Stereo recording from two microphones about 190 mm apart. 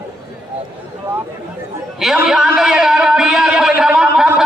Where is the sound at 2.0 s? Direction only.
5° right (ahead or behind).